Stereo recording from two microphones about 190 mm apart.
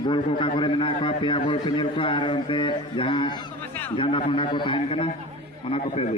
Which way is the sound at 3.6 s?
10° left (ahead or behind).